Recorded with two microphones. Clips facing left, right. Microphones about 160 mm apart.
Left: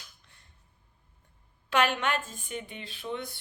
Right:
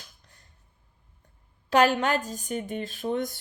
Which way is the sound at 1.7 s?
40° right (ahead or behind).